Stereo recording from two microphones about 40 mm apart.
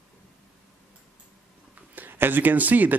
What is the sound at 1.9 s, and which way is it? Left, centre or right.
Speech, right.